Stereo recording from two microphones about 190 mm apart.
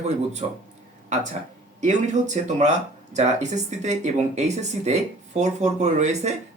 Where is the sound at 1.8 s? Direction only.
40° right (ahead or behind).